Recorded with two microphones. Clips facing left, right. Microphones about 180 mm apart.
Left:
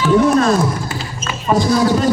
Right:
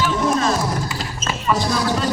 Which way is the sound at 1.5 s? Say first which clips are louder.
Left 6 dB; 40° left (ahead or behind).